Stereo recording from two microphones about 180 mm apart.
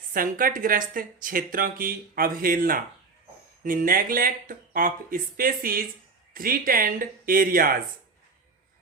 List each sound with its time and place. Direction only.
0.1 s speech: 50° right (ahead or behind)